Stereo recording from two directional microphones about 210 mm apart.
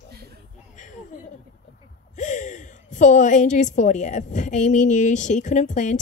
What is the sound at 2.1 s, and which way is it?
A woman's voice, 35° left (ahead or behind).